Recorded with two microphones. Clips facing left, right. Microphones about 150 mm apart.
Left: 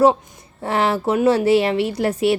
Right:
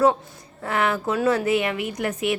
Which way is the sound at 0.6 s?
30° left (ahead or behind).